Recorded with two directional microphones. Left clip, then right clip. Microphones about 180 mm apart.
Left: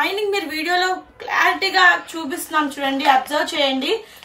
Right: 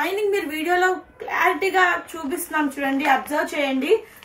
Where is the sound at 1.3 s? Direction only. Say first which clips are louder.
Left 3 dB; 15° left (ahead or behind).